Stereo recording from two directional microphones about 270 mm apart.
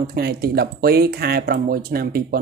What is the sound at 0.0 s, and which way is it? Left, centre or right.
Speech, right.